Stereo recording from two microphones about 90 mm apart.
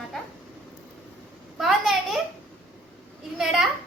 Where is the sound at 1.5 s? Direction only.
5° right (ahead or behind).